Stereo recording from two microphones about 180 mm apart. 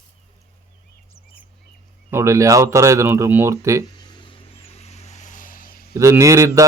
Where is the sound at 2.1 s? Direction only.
15° right (ahead or behind).